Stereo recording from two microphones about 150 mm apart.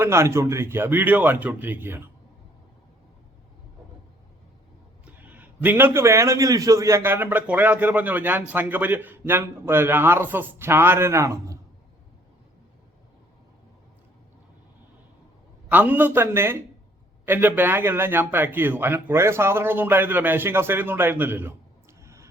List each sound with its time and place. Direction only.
0.0 s a man's voice: 15° right (ahead or behind)
5.2 s a man's voice: 10° right (ahead or behind)
15.7 s a man's voice: 10° right (ahead or behind)
22.0 s a sound: 20° right (ahead or behind)